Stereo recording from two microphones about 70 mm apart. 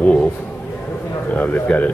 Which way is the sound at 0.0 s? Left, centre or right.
Centre.